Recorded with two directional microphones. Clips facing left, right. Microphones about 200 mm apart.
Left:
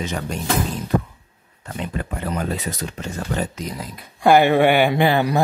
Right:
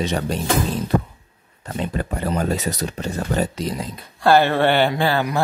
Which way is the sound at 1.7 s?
35° right (ahead or behind).